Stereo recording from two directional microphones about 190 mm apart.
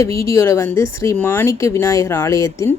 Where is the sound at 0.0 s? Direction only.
15° left (ahead or behind).